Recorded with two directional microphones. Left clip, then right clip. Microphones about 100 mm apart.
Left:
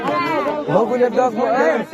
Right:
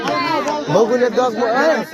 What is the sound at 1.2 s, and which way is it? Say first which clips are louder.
Speech: even; 90° right.